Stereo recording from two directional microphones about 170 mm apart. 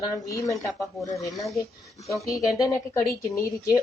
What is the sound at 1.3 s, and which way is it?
Speech, centre (ahead or behind).